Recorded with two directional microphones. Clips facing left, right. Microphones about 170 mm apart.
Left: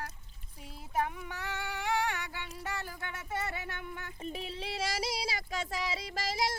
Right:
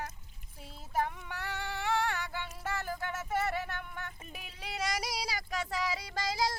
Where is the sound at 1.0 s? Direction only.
15° left (ahead or behind).